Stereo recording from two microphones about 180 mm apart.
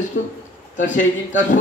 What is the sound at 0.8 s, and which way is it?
Speech, 45° left (ahead or behind).